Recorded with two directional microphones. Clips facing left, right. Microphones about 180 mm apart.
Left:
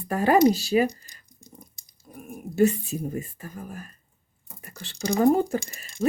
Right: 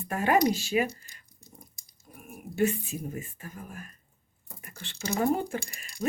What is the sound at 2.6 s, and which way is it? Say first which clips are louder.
Speech: left 6 dB; 40° left (ahead or behind).